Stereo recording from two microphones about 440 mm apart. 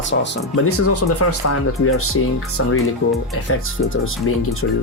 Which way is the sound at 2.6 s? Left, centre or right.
Left.